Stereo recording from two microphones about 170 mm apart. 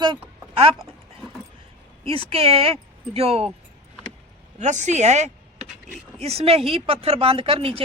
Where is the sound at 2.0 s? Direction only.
35° right (ahead or behind).